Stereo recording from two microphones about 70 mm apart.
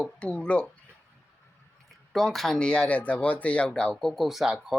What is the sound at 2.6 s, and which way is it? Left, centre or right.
Speech, centre.